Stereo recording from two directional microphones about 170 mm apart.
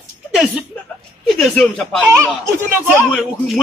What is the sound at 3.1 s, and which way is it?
Speech, centre (ahead or behind).